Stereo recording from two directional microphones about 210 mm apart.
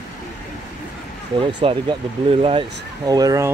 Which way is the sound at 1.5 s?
25° right (ahead or behind).